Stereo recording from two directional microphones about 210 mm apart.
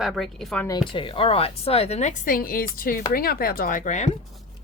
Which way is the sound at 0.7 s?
25° left (ahead or behind).